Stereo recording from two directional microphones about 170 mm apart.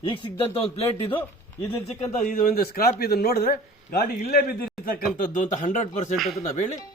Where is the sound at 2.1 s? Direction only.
55° left (ahead or behind).